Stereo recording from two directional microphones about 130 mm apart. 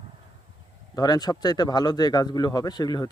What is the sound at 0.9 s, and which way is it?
A man's voice, 30° left (ahead or behind).